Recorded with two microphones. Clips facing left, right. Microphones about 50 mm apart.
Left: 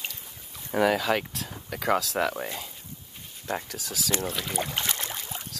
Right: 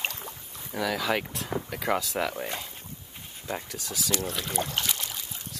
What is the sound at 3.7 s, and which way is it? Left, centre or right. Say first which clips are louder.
Speech: left 1 dB; centre.